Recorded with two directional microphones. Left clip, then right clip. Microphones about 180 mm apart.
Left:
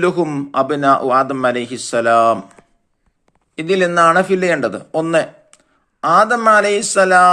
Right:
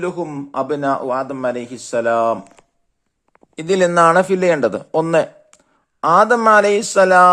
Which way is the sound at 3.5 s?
35° right (ahead or behind).